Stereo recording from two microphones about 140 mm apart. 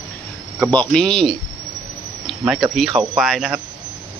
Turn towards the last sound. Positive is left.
turn(degrees=0)  # may be behind; listen again after turning